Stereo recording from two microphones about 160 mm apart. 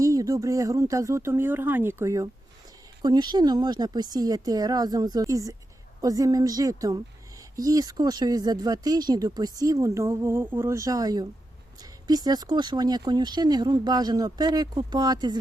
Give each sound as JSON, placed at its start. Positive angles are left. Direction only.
{"t": 0.0, "sound": "speech", "side_deg": -20}